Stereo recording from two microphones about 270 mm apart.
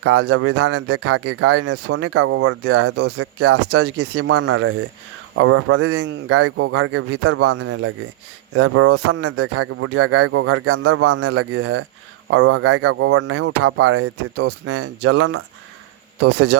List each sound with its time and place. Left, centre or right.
0.0 s speech: right
2.8 s speech: right
3.7 s speech: right
4.4 s speech: right
13.4 s speech: right
16.3 s speech: right